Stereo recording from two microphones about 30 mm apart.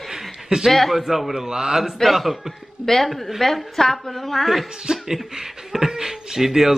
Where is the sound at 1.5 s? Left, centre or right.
Centre.